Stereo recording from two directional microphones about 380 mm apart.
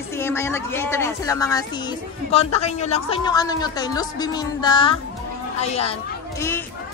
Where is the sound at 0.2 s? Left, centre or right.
Centre.